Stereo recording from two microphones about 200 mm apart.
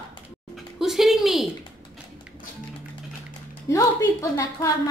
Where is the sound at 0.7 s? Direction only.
Centre (ahead or behind).